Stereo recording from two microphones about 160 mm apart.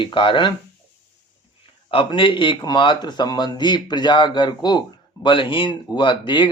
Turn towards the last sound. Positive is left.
turn(degrees=30)  # may be behind; listen again after turning